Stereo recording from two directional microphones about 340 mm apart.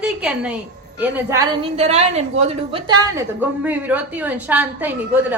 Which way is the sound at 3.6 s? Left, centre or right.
Centre.